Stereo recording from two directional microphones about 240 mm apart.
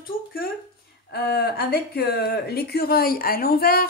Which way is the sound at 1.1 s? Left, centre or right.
Left.